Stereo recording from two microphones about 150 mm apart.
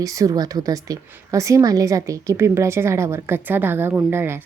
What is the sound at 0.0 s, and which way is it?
A woman's voice, 25° right (ahead or behind).